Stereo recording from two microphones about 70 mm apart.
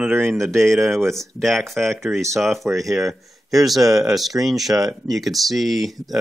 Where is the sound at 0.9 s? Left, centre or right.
Centre.